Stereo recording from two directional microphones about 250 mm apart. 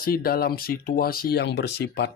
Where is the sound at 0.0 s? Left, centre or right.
Left.